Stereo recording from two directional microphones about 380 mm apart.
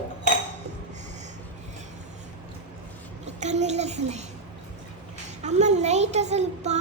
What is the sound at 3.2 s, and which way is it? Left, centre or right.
A child's voice, centre.